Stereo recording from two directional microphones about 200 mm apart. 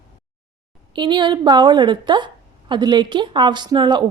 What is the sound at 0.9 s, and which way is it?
A woman's voice, 25° right (ahead or behind).